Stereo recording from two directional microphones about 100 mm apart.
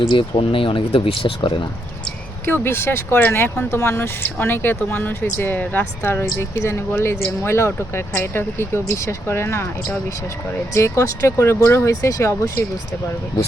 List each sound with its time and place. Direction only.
0.0 s speech: 60° left (ahead or behind)
2.5 s speech: 25° left (ahead or behind)